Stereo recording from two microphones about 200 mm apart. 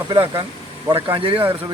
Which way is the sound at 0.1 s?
20° right (ahead or behind).